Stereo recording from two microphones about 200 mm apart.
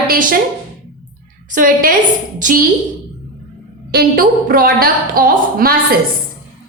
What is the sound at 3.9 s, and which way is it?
A woman's voice, 50° right (ahead or behind).